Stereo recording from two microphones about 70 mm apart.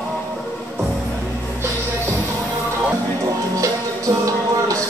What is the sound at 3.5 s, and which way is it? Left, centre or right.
Music, right.